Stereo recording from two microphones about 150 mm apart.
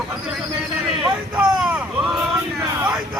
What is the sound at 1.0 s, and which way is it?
Speech, 5° right (ahead or behind).